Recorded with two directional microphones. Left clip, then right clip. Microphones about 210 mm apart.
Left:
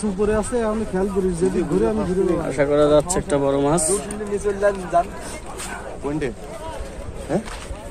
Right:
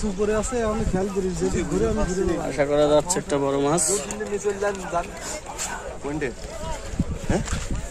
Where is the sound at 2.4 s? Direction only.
5° right (ahead or behind).